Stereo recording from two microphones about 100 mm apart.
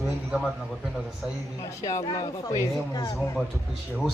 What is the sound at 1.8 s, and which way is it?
Speech, 35° left (ahead or behind).